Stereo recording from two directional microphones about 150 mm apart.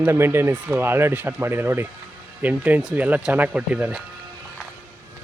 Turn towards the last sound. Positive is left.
turn(degrees=-10)  # may be behind; listen again after turning